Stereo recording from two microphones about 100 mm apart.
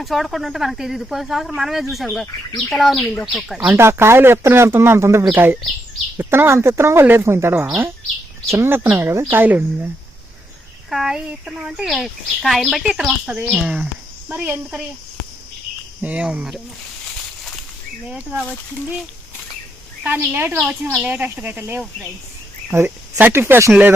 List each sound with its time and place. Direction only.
0.0 s speech: centre (ahead or behind)
3.8 s a man's voice: 25° right (ahead or behind)
10.8 s speech: 5° right (ahead or behind)
13.5 s cricket: 5° right (ahead or behind)
14.3 s a man's voice: 20° right (ahead or behind)
16.0 s cricket: 15° right (ahead or behind)
18.1 s cricket: 10° right (ahead or behind)
20.1 s a man's voice: 20° right (ahead or behind)
21.1 s cricket: 15° right (ahead or behind)
22.7 s a man's voice: 20° right (ahead or behind)